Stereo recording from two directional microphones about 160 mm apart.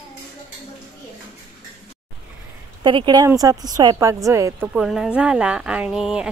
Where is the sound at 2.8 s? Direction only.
30° right (ahead or behind).